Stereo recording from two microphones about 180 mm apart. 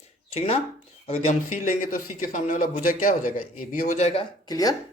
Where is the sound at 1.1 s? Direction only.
40° left (ahead or behind).